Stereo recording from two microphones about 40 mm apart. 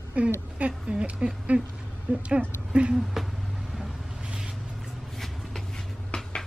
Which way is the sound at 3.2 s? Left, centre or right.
Centre.